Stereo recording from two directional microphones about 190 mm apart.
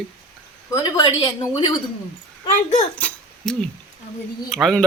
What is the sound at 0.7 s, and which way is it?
Speech, 20° left (ahead or behind).